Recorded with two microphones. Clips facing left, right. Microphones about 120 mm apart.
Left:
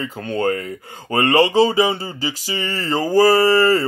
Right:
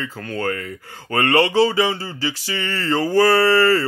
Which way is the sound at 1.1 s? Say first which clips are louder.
Left 2 dB; 20° left (ahead or behind).